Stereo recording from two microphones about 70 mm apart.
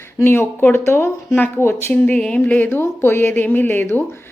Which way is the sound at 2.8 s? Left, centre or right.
Left.